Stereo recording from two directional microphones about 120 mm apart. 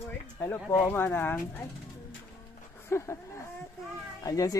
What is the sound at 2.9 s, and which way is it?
Speech, 25° left (ahead or behind).